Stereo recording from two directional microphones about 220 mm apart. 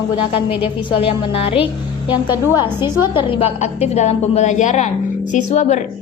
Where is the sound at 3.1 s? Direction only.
25° left (ahead or behind).